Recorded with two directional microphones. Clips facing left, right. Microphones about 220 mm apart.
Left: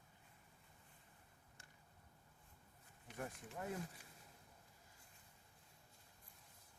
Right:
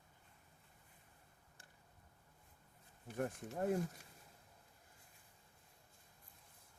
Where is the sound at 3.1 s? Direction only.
45° right (ahead or behind).